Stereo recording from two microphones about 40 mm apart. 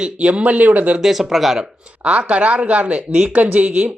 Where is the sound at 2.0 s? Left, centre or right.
Right.